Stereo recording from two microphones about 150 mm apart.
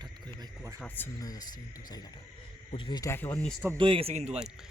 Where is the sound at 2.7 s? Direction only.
30° left (ahead or behind).